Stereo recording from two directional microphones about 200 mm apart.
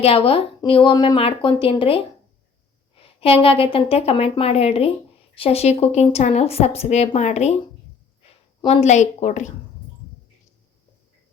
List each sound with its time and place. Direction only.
0.0 s a woman's voice: 30° left (ahead or behind)
8.6 s a woman's voice: 35° left (ahead or behind)